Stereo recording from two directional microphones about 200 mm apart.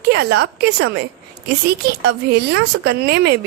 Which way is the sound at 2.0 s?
55° right (ahead or behind).